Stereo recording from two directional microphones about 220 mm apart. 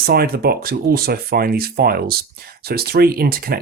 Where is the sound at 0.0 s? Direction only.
45° right (ahead or behind).